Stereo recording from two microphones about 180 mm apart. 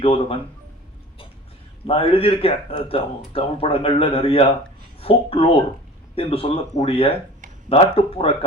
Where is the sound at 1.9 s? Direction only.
30° left (ahead or behind).